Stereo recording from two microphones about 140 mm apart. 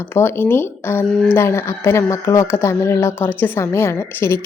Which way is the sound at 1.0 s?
5° left (ahead or behind).